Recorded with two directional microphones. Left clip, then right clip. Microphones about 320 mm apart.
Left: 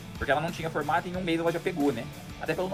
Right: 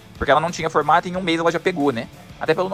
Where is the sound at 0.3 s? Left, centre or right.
Right.